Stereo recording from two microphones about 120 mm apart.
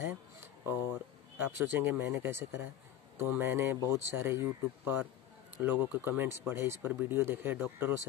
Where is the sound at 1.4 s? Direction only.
15° right (ahead or behind).